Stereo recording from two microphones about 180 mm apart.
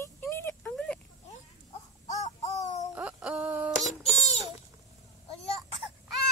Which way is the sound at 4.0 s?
35° left (ahead or behind).